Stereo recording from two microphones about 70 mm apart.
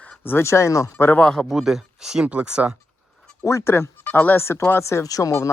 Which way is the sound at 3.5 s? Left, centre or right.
Left.